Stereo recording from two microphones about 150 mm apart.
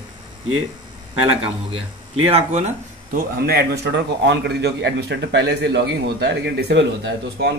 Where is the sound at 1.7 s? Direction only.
45° right (ahead or behind).